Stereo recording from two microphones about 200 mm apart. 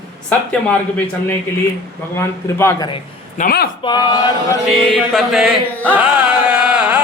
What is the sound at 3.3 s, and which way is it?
Speech, 45° left (ahead or behind).